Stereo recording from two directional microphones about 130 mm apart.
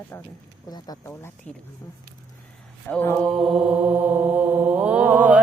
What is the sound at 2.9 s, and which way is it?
Mantra, 10° left (ahead or behind).